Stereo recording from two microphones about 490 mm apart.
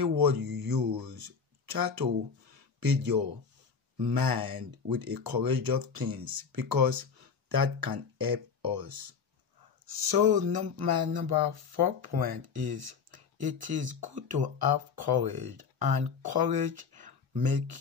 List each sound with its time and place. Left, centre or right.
0.2 s speech: right